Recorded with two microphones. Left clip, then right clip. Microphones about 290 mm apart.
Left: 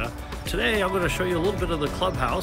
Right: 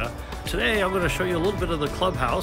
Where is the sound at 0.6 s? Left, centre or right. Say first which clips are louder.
Right 1 dB; centre.